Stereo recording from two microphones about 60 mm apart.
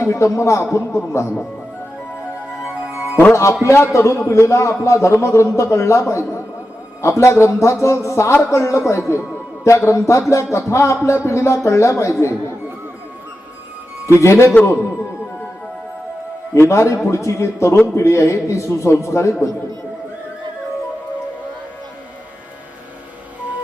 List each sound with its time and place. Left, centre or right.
0.0 s a man's voice: left
3.6 s a man's voice: left
14.1 s a man's voice: left
16.6 s a man's voice: left